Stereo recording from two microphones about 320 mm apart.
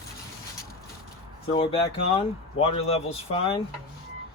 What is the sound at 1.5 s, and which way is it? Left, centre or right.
Speech, centre.